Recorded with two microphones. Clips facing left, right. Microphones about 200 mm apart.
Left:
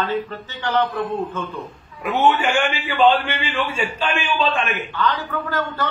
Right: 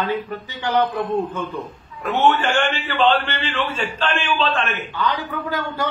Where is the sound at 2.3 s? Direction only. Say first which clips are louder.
Even; 10° left (ahead or behind).